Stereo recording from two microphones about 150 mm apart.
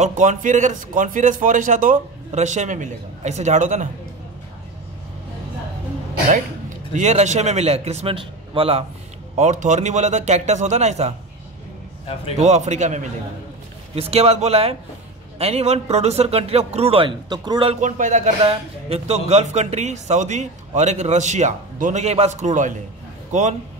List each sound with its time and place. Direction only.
0.0 s a man's voice: 55° right (ahead or behind)
6.9 s speech: 50° right (ahead or behind)
9.4 s speech: 55° right (ahead or behind)
12.4 s speech: 50° right (ahead or behind); by 17.7 s 30° right (ahead or behind)
17.7 s speech: 55° right (ahead or behind)